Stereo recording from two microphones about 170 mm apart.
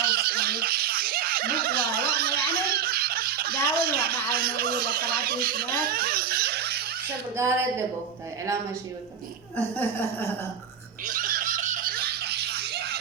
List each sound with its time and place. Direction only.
0.0 s snicker: 65° right (ahead or behind)
5.8 s laughter: 60° right (ahead or behind)
7.3 s speech: 15° right (ahead or behind)
9.6 s speech: 10° left (ahead or behind)
11.0 s snicker: 55° right (ahead or behind)